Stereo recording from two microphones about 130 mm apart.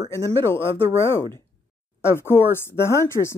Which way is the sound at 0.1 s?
20° left (ahead or behind).